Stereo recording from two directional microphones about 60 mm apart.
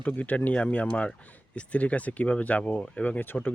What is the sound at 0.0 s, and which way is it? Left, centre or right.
Speech, left.